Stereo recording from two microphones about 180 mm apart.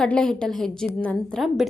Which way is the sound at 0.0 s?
5° left (ahead or behind).